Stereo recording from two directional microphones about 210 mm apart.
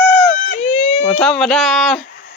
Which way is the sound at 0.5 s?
30° left (ahead or behind).